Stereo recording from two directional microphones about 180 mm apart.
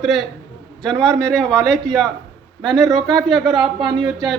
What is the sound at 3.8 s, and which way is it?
Speech, 25° right (ahead or behind).